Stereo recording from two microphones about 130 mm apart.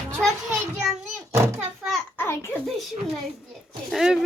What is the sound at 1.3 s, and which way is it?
Speech, 20° right (ahead or behind).